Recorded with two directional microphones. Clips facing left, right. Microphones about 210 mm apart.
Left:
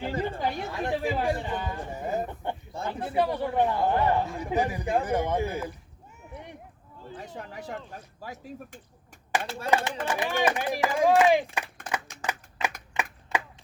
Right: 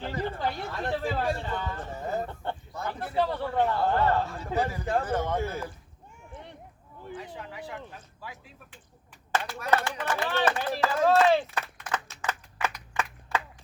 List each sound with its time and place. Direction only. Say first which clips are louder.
0.3 s a man's voice: left 1 dB; 15° left (ahead or behind)
6.3 s a sound: left 3 dB; 15° left (ahead or behind)
7.2 s speech: left 3 dB; 45° left (ahead or behind)
9.6 s a man's voice: left 1 dB; 15° left (ahead or behind)
11.5 s a sound: even; 15° left (ahead or behind)
12.2 s clapping: even; 15° left (ahead or behind)